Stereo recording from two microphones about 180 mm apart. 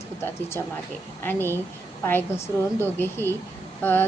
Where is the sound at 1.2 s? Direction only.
10° left (ahead or behind).